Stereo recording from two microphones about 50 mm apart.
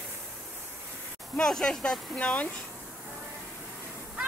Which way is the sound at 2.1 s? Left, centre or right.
Left.